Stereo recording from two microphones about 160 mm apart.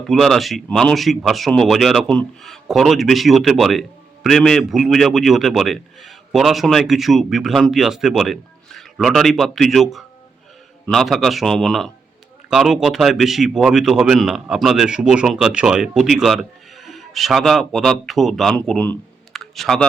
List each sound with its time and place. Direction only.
0.0 s a man's voice: centre (ahead or behind)